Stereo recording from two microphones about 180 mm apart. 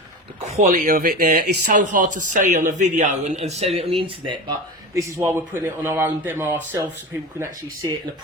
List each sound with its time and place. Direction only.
0.4 s speech: 40° right (ahead or behind)
1.6 s speech: 45° right (ahead or behind); by 4.5 s 25° right (ahead or behind)
4.9 s speech: 15° right (ahead or behind)